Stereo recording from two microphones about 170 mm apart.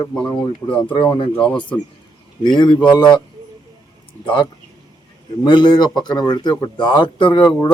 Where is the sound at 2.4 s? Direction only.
25° left (ahead or behind).